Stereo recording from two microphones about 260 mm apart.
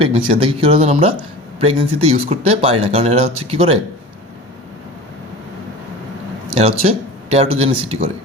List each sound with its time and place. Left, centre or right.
0.0 s speech: right
6.5 s speech: right